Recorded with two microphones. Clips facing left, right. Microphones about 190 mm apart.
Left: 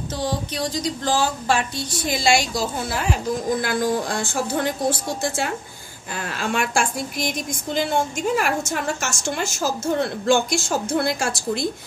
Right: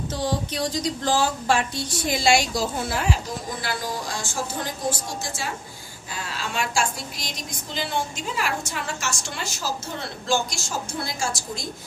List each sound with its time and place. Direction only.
0.2 s speech: centre (ahead or behind)
3.6 s a woman's voice: 55° left (ahead or behind)